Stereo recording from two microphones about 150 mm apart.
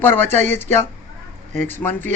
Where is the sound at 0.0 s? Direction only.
15° left (ahead or behind).